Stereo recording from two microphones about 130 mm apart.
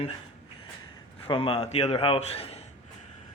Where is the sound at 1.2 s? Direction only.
45° left (ahead or behind).